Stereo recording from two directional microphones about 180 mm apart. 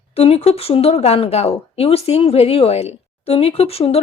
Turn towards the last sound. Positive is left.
turn(degrees=35)  # may be behind; listen again after turning